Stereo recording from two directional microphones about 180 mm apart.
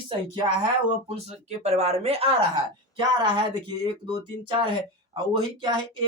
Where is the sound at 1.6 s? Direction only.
35° right (ahead or behind).